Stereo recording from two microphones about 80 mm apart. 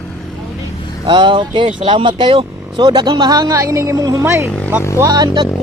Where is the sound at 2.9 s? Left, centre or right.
Right.